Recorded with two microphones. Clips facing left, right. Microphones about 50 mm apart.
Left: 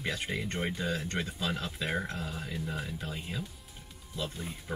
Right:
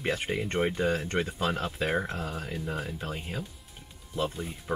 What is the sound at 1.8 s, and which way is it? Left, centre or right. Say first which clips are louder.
Speech: right 4 dB; centre.